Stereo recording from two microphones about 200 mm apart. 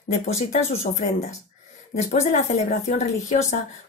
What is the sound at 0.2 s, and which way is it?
Speech, 35° left (ahead or behind).